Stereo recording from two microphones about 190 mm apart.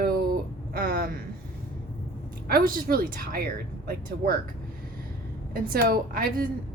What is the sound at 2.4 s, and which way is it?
A woman's voice, 50° right (ahead or behind).